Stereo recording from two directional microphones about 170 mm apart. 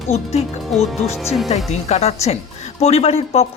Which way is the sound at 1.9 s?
40° left (ahead or behind).